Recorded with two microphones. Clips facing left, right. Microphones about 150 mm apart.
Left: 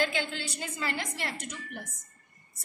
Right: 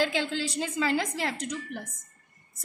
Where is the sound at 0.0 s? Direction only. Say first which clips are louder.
Right 3 dB; 90° right.